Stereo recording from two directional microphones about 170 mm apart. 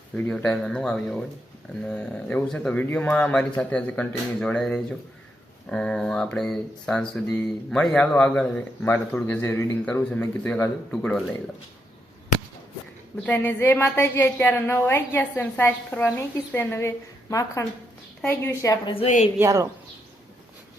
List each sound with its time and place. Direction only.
0.2 s speech: 5° left (ahead or behind)
13.2 s a woman's voice: 10° left (ahead or behind)
19.4 s speech: 20° right (ahead or behind)